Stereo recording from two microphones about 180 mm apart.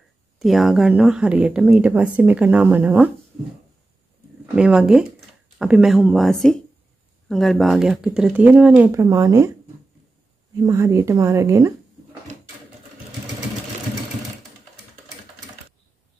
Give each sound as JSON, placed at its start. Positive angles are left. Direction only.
{"t": 0.4, "sound": "speech", "side_deg": 0}
{"t": 4.6, "sound": "speech", "side_deg": -5}
{"t": 8.9, "sound": "speech", "side_deg": -20}
{"t": 10.6, "sound": "speech", "side_deg": -15}